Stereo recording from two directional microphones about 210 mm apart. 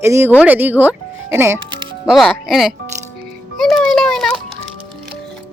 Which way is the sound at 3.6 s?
Centre (ahead or behind).